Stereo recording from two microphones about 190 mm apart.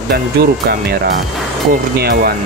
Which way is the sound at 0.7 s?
55° right (ahead or behind).